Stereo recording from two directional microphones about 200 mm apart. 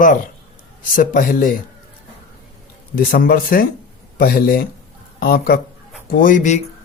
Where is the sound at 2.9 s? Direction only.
45° left (ahead or behind).